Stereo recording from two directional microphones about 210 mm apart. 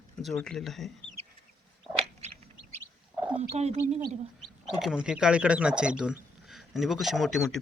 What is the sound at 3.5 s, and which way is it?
Speech, 30° right (ahead or behind).